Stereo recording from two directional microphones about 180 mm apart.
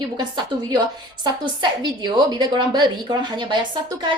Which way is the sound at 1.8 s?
25° right (ahead or behind).